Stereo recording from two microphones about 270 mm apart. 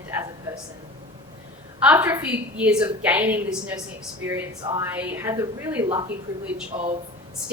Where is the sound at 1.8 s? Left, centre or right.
Centre.